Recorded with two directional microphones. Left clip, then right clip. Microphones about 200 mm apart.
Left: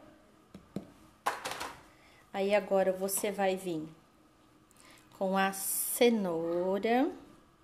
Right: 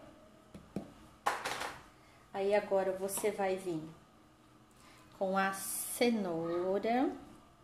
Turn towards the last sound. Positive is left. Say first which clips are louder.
# left 3 dB
turn(degrees=40)  # may be behind; listen again after turning